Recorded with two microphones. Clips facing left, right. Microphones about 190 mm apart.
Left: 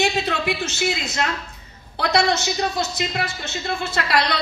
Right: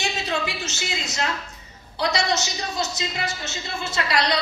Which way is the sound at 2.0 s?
55° left (ahead or behind).